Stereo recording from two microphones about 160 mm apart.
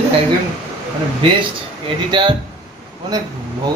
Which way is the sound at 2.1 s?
30° right (ahead or behind).